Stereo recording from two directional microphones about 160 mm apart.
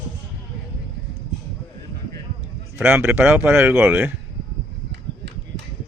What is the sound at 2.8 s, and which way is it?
Speech, 15° right (ahead or behind).